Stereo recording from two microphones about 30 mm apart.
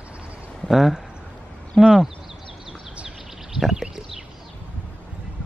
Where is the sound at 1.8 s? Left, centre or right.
Centre.